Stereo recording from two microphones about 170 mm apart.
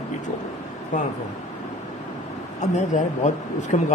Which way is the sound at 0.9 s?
50° left (ahead or behind).